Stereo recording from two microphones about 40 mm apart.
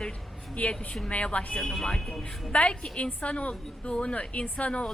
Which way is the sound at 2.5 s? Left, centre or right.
Left.